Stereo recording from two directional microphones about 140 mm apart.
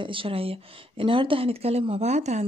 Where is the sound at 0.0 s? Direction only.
40° right (ahead or behind).